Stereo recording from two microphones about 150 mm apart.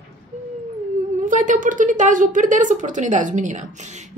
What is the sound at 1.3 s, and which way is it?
A woman's voice, 60° right (ahead or behind).